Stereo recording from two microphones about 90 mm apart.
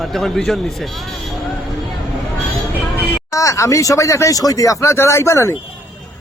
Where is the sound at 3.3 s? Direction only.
35° left (ahead or behind).